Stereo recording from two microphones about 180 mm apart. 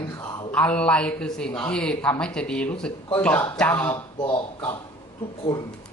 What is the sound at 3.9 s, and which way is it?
Speech, 25° left (ahead or behind).